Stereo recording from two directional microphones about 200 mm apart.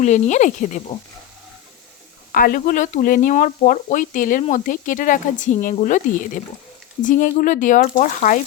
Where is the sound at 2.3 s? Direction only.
45° left (ahead or behind).